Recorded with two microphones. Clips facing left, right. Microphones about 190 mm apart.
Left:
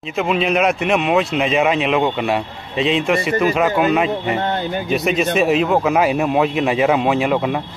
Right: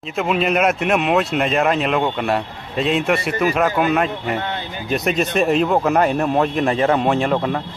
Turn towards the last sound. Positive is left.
turn(degrees=10)  # may be behind; listen again after turning